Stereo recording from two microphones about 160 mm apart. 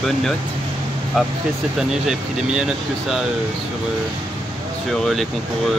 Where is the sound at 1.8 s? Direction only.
5° right (ahead or behind).